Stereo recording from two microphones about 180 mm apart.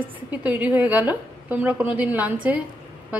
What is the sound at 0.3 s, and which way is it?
A woman's voice, 10° right (ahead or behind).